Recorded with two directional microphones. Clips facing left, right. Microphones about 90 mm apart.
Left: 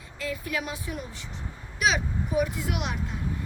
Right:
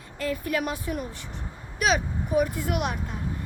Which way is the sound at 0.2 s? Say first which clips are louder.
Right 4 dB; 45° right (ahead or behind).